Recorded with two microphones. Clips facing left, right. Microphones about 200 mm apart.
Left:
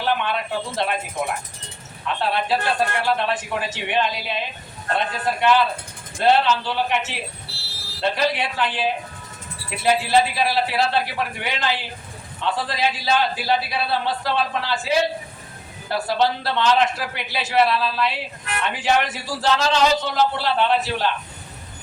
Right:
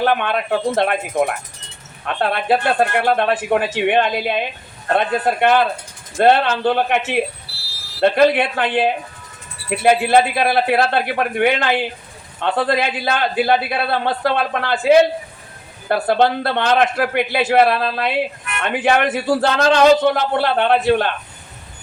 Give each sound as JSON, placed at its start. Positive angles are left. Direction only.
{"t": 0.0, "sound": "a man's voice", "side_deg": -55}